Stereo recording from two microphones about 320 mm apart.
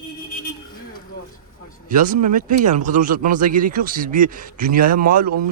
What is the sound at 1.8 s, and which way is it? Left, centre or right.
Speech, right.